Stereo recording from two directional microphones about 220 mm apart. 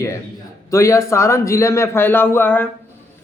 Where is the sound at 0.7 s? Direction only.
15° left (ahead or behind).